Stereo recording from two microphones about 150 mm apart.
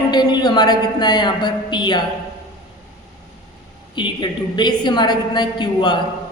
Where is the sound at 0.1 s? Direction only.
30° left (ahead or behind).